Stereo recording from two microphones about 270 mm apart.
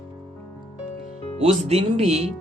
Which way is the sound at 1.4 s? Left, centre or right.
Right.